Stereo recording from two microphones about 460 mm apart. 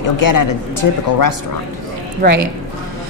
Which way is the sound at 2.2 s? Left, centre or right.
Right.